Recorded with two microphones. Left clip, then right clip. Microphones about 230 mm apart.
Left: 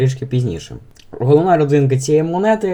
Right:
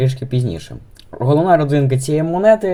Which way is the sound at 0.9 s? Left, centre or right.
Centre.